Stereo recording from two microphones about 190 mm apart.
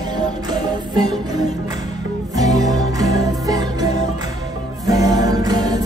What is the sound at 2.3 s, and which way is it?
Music, 20° right (ahead or behind).